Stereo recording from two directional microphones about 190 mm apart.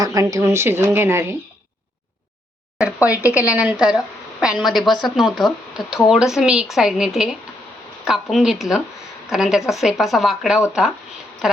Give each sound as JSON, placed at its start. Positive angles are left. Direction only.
{"t": 0.0, "sound": "speech", "side_deg": -15}
{"t": 2.7, "sound": "a woman's voice", "side_deg": -5}